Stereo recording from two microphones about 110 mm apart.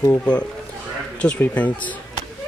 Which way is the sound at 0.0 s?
25° left (ahead or behind).